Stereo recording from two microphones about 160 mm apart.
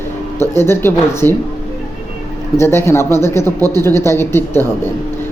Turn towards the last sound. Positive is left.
turn(degrees=15)  # may be behind; listen again after turning